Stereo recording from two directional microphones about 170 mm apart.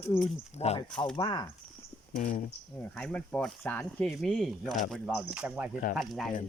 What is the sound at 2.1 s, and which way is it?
Speech, 55° left (ahead or behind).